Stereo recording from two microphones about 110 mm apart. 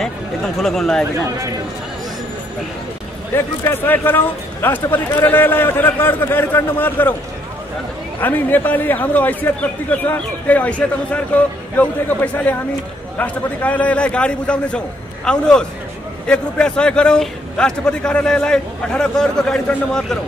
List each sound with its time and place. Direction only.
0.6 s speech: 5° left (ahead or behind)
3.3 s speech: 20° left (ahead or behind)
8.2 s a man's voice: 15° left (ahead or behind)